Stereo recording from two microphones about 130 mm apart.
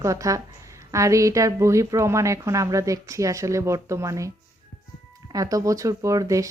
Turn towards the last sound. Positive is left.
turn(degrees=-25)  # may be behind; listen again after turning